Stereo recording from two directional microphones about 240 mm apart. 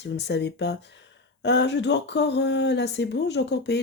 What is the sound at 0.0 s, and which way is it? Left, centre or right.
Speech, left.